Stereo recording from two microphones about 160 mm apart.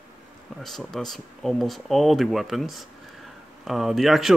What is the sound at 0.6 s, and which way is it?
Speech, centre (ahead or behind).